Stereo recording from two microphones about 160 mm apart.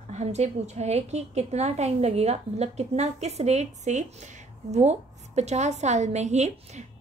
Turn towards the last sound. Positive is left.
turn(degrees=-45)  # may be behind; listen again after turning